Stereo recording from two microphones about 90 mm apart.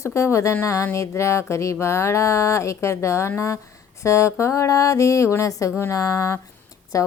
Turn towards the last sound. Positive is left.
turn(degrees=35)  # may be behind; listen again after turning